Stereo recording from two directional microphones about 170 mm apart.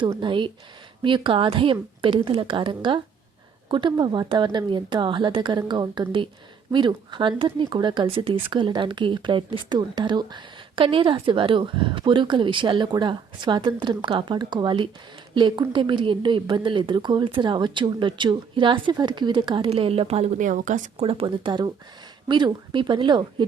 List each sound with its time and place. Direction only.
0.2 s speech: 30° right (ahead or behind); by 21.1 s 50° right (ahead or behind)
21.1 s speech: 30° right (ahead or behind)